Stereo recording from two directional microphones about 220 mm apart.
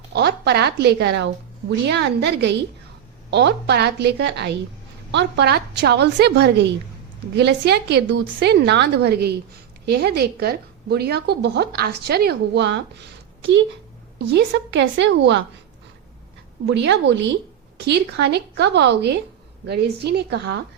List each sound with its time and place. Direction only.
0.1 s a woman's voice: 50° right (ahead or behind)
16.6 s a woman's voice: 50° right (ahead or behind)